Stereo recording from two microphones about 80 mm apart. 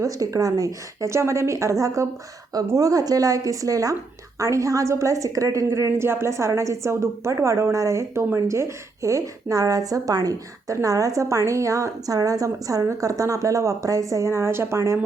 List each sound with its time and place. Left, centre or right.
0.0 s a woman's voice: right